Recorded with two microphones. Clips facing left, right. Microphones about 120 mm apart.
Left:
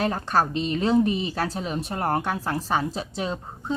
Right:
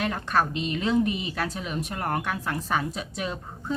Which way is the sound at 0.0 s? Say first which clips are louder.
Left 2 dB; 35° left (ahead or behind).